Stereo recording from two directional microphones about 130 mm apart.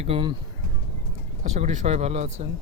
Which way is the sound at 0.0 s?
45° right (ahead or behind).